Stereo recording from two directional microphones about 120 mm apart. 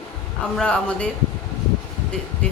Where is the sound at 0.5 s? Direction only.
10° left (ahead or behind).